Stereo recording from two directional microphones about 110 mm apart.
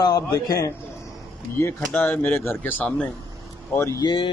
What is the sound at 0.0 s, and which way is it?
Speech, 35° left (ahead or behind).